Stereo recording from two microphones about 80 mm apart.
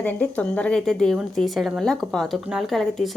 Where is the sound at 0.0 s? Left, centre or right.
Centre.